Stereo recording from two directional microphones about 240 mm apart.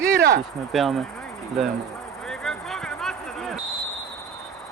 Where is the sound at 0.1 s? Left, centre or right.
Right.